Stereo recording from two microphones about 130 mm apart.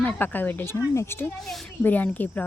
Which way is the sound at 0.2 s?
15° left (ahead or behind).